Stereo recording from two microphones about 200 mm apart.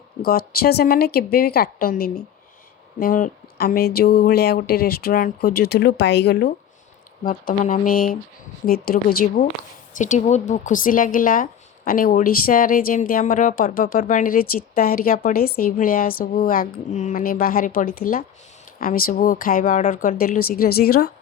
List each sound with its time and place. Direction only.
0.2 s a woman's voice: 50° left (ahead or behind)
7.3 s a woman's voice: 40° left (ahead or behind)